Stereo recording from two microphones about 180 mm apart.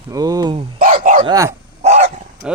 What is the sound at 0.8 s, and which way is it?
Bow-wow, 50° right (ahead or behind).